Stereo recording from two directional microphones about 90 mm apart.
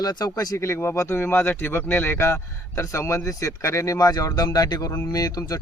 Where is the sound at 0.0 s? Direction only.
45° left (ahead or behind).